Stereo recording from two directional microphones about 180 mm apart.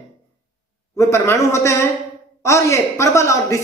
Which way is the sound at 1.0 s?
15° left (ahead or behind).